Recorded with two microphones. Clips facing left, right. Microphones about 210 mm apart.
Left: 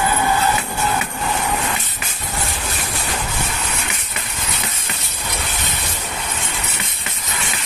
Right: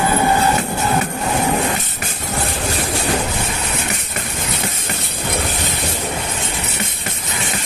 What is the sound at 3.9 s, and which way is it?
Vehicle, 50° right (ahead or behind).